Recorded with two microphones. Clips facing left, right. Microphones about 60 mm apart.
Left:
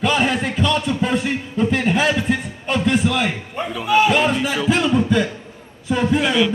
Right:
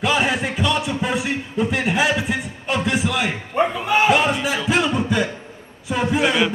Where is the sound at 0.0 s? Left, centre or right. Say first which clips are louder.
Left 1 dB; centre.